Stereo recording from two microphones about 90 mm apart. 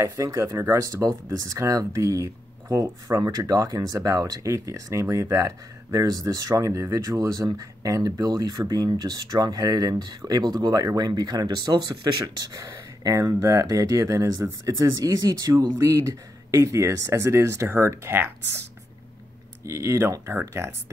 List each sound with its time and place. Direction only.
0.0 s speech: 35° right (ahead or behind)
19.6 s speech: 35° right (ahead or behind)